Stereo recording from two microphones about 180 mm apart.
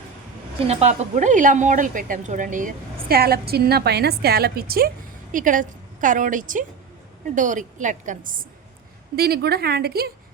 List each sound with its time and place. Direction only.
0.7 s a woman's voice: 40° right (ahead or behind); by 4.9 s 55° right (ahead or behind)
5.3 s a woman's voice: 45° right (ahead or behind)